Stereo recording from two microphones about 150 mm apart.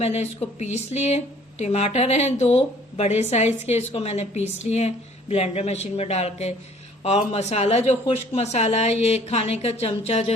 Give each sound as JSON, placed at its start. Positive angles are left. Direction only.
{"t": 0.0, "sound": "speech", "side_deg": 45}